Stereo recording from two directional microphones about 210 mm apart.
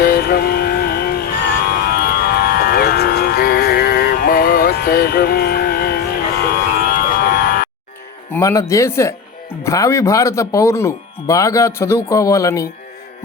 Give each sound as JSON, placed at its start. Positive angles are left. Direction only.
{"t": 0.0, "sound": "music", "side_deg": 45}
{"t": 6.5, "sound": "a sound", "side_deg": 45}
{"t": 8.3, "sound": "speech", "side_deg": 15}